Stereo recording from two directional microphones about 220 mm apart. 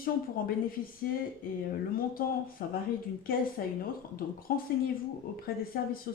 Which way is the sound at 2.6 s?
40° left (ahead or behind).